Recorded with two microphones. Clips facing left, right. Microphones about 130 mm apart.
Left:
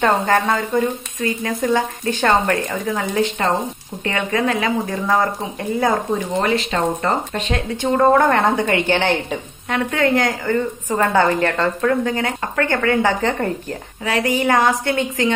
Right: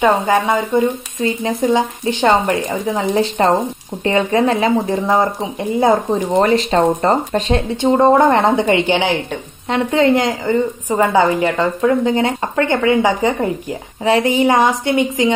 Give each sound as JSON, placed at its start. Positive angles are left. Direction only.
{"t": 0.7, "sound": "a woman's voice", "side_deg": -25}
{"t": 3.2, "sound": "speech", "side_deg": -35}
{"t": 6.4, "sound": "a woman's voice", "side_deg": -40}
{"t": 14.0, "sound": "speech", "side_deg": -25}